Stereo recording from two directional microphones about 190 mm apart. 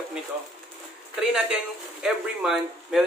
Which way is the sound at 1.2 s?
Centre (ahead or behind).